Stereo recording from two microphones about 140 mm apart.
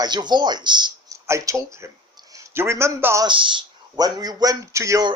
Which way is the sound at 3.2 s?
35° right (ahead or behind).